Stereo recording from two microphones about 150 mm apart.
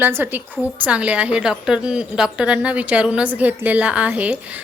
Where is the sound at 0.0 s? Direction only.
15° right (ahead or behind).